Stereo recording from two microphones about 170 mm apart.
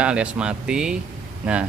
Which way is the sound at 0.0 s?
5° right (ahead or behind).